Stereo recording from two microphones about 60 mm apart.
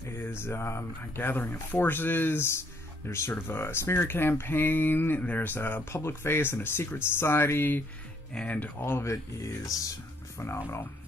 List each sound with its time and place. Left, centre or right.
0.2 s speech: left
5.9 s speech: left
8.5 s speech: left
8.7 s speech: left
9.0 s speech: left